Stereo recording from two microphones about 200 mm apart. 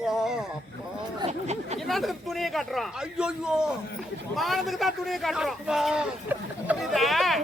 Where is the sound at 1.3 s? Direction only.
35° right (ahead or behind).